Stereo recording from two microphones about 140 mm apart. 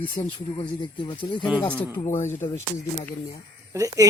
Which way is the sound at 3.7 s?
25° right (ahead or behind).